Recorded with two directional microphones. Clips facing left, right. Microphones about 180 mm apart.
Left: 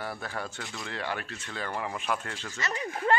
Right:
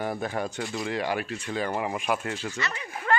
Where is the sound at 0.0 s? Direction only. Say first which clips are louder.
Right 7 dB; 20° right (ahead or behind).